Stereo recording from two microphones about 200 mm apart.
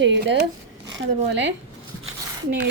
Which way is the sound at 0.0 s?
65° right (ahead or behind).